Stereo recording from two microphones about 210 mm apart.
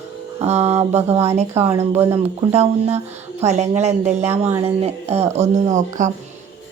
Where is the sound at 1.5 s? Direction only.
10° right (ahead or behind).